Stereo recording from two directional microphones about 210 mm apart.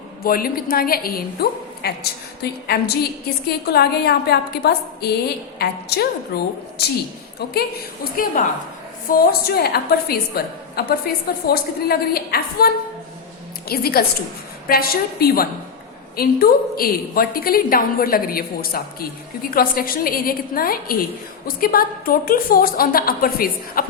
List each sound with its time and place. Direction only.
0.2 s a woman's voice: 45° left (ahead or behind)
8.1 s a woman's voice: 45° left (ahead or behind)